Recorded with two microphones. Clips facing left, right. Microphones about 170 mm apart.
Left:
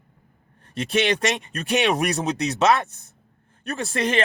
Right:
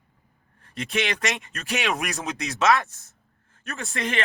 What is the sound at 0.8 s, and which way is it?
Speech, 30° left (ahead or behind).